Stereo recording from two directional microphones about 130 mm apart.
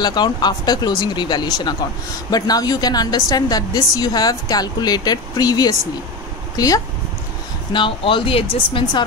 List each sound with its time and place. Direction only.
0.0 s a woman's voice: 35° left (ahead or behind)
7.7 s a woman's voice: 40° left (ahead or behind)